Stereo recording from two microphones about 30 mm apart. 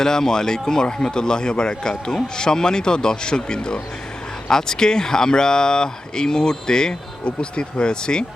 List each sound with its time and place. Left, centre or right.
0.0 s a man's voice: centre